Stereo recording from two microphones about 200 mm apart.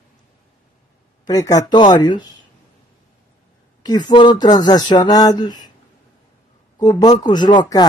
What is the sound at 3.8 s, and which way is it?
Speech, 20° left (ahead or behind).